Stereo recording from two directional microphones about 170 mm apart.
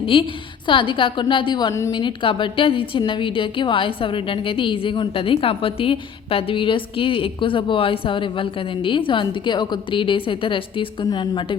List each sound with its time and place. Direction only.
0.0 s a woman's voice: 30° left (ahead or behind)